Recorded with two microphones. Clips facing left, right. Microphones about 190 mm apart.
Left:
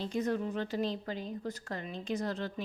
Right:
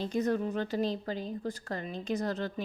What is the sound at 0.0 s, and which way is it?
A woman's voice, 45° right (ahead or behind).